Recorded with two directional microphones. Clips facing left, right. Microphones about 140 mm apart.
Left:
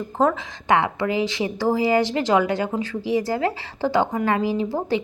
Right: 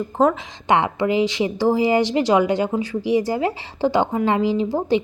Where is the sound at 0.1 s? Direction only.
15° right (ahead or behind).